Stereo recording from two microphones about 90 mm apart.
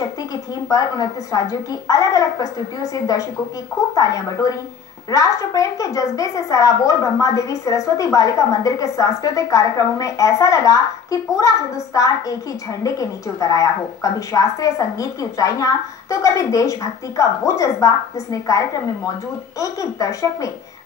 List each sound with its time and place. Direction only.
0.7 s a woman's voice: 45° left (ahead or behind)
19.6 s a woman's voice: 35° left (ahead or behind)